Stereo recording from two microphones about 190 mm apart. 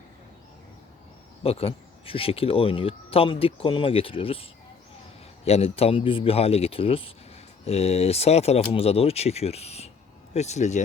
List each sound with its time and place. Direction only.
1.5 s speech: 30° left (ahead or behind)
5.5 s speech: 30° left (ahead or behind)